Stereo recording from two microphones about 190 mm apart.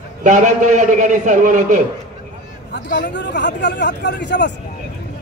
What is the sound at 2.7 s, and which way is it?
Speech, 65° left (ahead or behind).